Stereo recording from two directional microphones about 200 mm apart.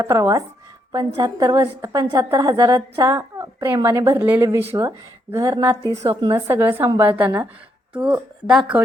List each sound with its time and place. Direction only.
0.0 s a woman's voice: 15° right (ahead or behind)